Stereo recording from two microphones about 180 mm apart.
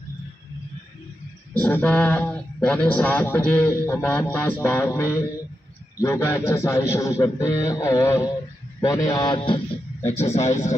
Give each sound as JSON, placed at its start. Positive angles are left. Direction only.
{"t": 1.5, "sound": "mantra", "side_deg": 10}
{"t": 9.1, "sound": "music", "side_deg": 25}
{"t": 10.0, "sound": "a man's voice", "side_deg": 35}